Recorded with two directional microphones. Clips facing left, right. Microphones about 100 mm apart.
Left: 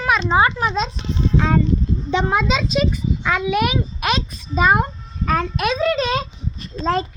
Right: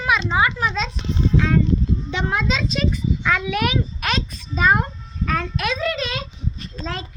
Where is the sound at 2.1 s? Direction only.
20° left (ahead or behind).